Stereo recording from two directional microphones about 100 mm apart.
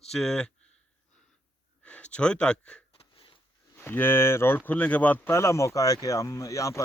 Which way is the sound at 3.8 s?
20° left (ahead or behind).